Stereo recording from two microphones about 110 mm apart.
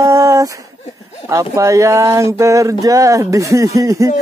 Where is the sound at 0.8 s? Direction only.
80° left.